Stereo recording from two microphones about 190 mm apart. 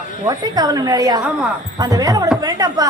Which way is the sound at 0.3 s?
20° right (ahead or behind).